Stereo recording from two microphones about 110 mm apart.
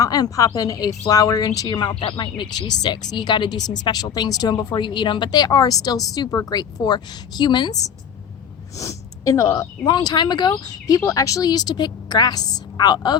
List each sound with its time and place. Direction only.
0.0 s speech: 35° left (ahead or behind)
9.8 s speech: 40° left (ahead or behind)